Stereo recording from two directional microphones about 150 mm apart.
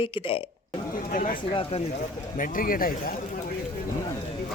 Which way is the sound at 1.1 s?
65° left (ahead or behind).